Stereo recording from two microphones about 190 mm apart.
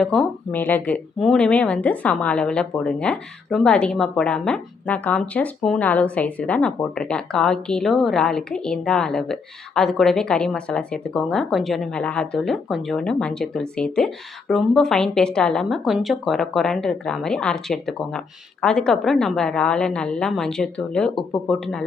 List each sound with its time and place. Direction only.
0.0 s speech: 5° left (ahead or behind)